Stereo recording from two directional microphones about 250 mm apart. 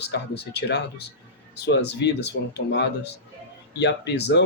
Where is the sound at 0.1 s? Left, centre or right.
Left.